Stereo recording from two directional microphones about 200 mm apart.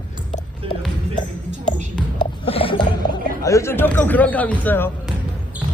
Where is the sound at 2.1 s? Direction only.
25° left (ahead or behind).